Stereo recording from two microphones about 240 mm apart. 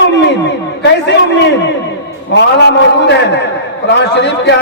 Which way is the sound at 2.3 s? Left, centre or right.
Left.